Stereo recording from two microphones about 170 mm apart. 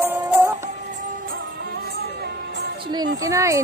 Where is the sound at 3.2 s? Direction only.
20° right (ahead or behind).